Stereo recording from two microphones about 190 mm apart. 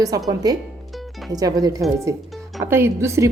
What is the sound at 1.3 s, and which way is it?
A woman's voice, 20° right (ahead or behind).